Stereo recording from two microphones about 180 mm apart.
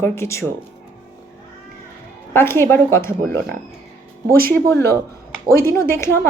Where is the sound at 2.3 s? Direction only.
15° left (ahead or behind).